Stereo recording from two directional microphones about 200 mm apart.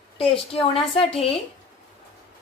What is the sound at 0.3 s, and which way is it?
Speech, 30° left (ahead or behind).